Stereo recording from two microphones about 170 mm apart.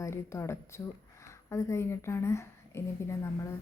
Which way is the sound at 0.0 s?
15° left (ahead or behind).